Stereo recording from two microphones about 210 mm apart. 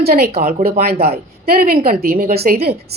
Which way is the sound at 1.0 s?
50° right (ahead or behind).